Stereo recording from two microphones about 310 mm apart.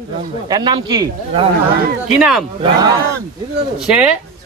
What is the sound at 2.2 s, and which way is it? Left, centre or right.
Speech, centre.